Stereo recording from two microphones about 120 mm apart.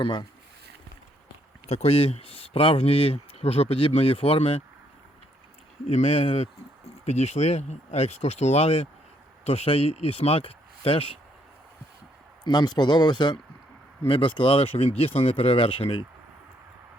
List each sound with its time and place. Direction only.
0.0 s speech: 40° left (ahead or behind)
1.6 s speech: 60° left (ahead or behind)
5.9 s speech: 55° left (ahead or behind)
7.0 s speech: 65° left (ahead or behind); by 11.0 s 50° left (ahead or behind)
12.5 s speech: 35° left (ahead or behind)